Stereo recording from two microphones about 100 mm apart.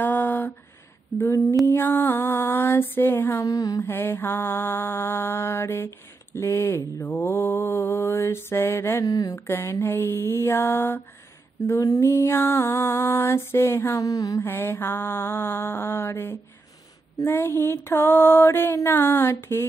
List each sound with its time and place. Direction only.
0.0 s a sound: 20° left (ahead or behind)
1.1 s speech: 30° left (ahead or behind)
1.7 s mantra: 25° left (ahead or behind)
3.8 s mantra: 20° left (ahead or behind)
9.1 s speech: 40° left (ahead or behind)
9.5 s mantra: 25° left (ahead or behind)
14.4 s mantra: 20° left (ahead or behind)